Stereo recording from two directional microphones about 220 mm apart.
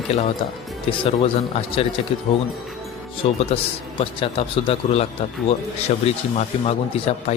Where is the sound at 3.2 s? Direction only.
25° left (ahead or behind).